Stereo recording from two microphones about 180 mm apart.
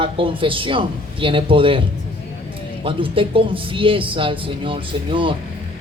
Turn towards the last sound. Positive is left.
turn(degrees=-30)  # may be behind; listen again after turning